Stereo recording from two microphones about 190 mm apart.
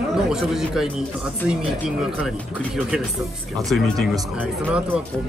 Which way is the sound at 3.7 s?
Centre (ahead or behind).